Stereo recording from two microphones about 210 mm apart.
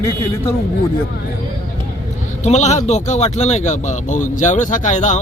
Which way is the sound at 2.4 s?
35° left (ahead or behind).